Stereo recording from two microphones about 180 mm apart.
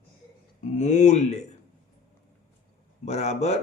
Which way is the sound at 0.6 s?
40° left (ahead or behind).